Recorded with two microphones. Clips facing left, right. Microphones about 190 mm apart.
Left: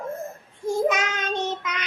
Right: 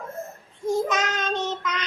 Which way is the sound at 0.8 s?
10° left (ahead or behind).